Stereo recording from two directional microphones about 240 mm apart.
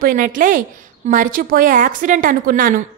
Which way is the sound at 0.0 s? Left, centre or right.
Right.